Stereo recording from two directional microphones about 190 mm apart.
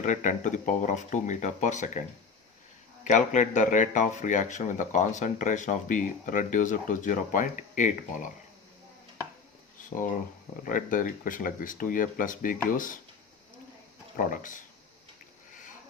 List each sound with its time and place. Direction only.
0.0 s speech: 40° left (ahead or behind)
10.6 s speech: 45° left (ahead or behind)
14.2 s speech: 45° left (ahead or behind)